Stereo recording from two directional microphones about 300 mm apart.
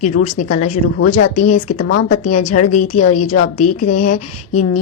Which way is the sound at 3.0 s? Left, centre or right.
Left.